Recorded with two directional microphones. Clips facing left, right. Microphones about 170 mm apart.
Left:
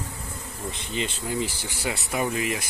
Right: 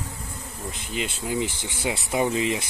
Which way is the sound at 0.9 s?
5° right (ahead or behind).